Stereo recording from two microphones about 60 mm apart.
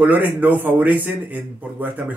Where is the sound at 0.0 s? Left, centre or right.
Right.